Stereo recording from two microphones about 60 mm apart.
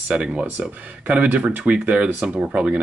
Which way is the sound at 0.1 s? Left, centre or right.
Right.